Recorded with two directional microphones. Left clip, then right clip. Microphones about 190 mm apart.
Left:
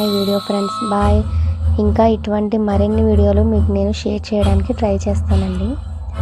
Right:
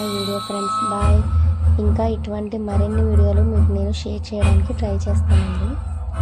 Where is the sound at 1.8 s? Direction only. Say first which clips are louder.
Left 9 dB; 30° left (ahead or behind).